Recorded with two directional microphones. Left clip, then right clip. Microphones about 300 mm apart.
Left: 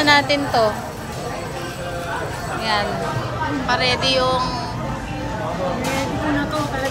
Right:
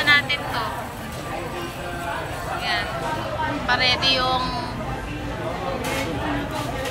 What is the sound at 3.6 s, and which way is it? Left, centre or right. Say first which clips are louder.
Speech: left 1 dB; centre.